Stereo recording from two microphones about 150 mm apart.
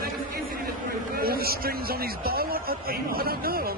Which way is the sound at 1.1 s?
90° right.